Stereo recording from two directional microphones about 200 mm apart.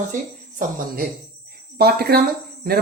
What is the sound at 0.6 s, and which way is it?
Speech, 45° right (ahead or behind).